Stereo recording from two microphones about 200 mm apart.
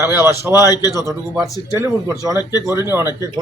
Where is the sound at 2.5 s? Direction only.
20° left (ahead or behind).